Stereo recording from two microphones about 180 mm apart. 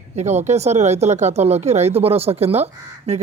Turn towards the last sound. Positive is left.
turn(degrees=-35)  # may be behind; listen again after turning